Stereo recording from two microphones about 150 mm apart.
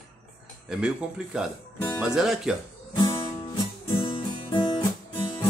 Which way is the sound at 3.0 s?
30° left (ahead or behind).